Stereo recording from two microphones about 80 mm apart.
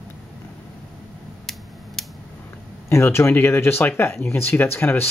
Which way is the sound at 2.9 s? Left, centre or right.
Left.